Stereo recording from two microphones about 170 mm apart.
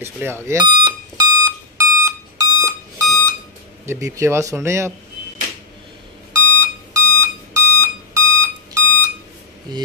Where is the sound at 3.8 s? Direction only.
20° right (ahead or behind).